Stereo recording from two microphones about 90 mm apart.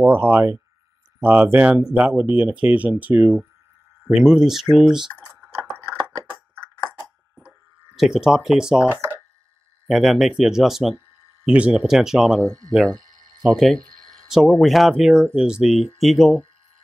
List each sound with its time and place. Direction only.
0.0 s speech: 20° right (ahead or behind)
4.0 s speech: 5° right (ahead or behind)
5.4 s chewing: 25° right (ahead or behind)
6.5 s a sound: 10° left (ahead or behind)
7.4 s cash register: 5° right (ahead or behind)
9.8 s speech: centre (ahead or behind)
12.4 s speech: 40° right (ahead or behind)
12.9 s a sound: 45° right (ahead or behind)
13.6 s speech: 5° left (ahead or behind)